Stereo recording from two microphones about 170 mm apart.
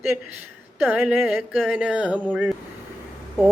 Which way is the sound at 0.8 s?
10° right (ahead or behind).